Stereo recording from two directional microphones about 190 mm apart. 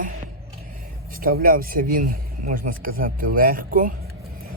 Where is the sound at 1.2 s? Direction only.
50° right (ahead or behind).